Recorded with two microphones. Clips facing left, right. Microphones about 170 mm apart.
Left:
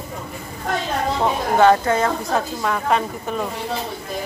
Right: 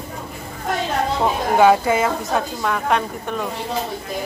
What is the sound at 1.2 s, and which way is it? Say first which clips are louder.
A woman's voice: right 1 dB; 10° right (ahead or behind).